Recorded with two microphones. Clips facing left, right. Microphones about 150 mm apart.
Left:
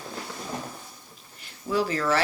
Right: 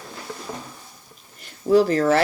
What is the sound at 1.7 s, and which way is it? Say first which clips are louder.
Speech: right 8 dB; 45° right (ahead or behind).